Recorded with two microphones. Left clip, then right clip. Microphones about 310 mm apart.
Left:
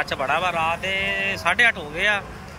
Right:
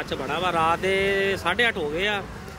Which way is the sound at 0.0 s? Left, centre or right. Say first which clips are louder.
Left 4 dB; centre.